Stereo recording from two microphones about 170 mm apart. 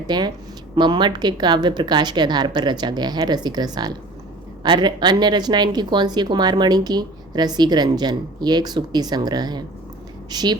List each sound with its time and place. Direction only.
0.1 s a woman's voice: 25° right (ahead or behind)